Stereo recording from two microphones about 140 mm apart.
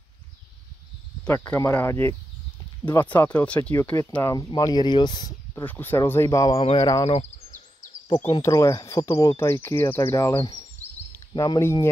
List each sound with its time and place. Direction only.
1.2 s speech: 10° left (ahead or behind)
4.2 s speech: 25° left (ahead or behind)
5.5 s speech: 15° left (ahead or behind); by 7.1 s 30° left (ahead or behind)
7.1 s a sound: 55° left (ahead or behind)
8.3 s speech: 25° left (ahead or behind)